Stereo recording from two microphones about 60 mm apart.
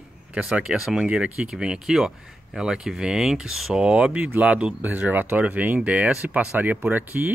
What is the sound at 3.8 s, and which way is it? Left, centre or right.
Speech, centre.